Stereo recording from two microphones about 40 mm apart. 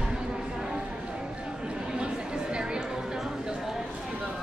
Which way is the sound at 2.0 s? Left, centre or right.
Right.